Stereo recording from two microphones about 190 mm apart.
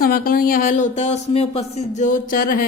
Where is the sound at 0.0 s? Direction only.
50° left (ahead or behind).